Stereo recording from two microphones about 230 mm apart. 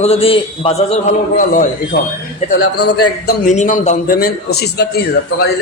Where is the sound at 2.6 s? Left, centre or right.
Left.